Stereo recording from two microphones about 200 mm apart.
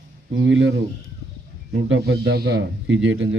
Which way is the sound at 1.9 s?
55° right (ahead or behind).